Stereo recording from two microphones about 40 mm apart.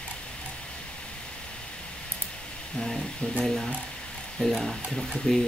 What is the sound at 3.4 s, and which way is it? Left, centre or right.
Speech, centre.